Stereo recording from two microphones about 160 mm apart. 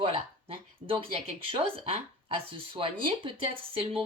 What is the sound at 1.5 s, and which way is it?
Speech, 35° right (ahead or behind).